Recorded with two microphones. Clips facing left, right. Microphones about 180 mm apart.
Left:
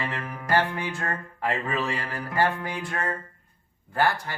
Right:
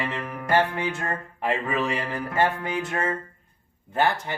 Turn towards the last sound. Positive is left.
turn(degrees=-20)  # may be behind; listen again after turning